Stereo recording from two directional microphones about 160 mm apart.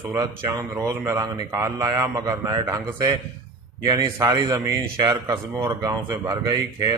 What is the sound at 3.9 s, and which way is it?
Speech, 25° right (ahead or behind).